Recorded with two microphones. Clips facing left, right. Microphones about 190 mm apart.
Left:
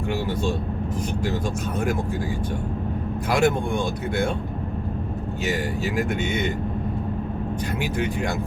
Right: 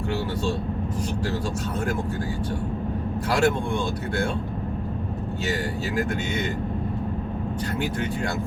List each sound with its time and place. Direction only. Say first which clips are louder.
3.3 s speech: left 2 dB; 15° left (ahead or behind)